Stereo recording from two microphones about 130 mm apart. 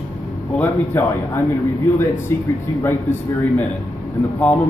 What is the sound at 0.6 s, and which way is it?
Speech, 15° left (ahead or behind).